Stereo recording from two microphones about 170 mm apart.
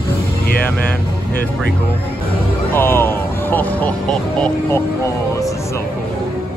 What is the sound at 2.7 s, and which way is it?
Speech, 15° left (ahead or behind).